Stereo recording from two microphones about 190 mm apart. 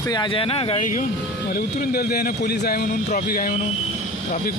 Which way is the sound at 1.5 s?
55° left (ahead or behind).